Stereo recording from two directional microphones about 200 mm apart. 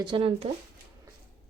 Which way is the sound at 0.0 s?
25° right (ahead or behind).